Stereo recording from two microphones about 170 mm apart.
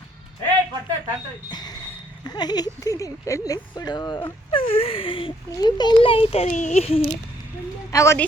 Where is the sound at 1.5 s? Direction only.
25° left (ahead or behind).